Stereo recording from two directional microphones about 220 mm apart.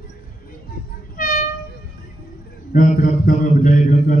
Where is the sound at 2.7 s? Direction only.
40° left (ahead or behind).